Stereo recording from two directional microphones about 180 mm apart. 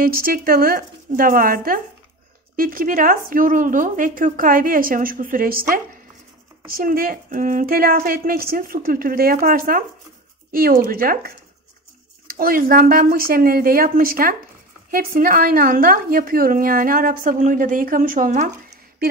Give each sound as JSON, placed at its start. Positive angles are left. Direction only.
{"t": 0.0, "sound": "a woman's voice", "side_deg": -55}
{"t": 6.7, "sound": "a woman's voice", "side_deg": -55}
{"t": 12.4, "sound": "a woman's voice", "side_deg": -55}